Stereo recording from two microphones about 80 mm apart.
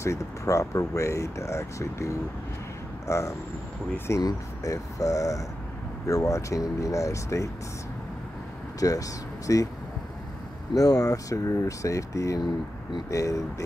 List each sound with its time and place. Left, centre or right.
0.0 s speech: left
4.2 s speech: left
8.7 s speech: left
10.8 s speech: left